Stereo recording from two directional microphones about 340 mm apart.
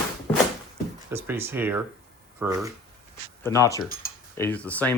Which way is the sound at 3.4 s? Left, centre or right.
Centre.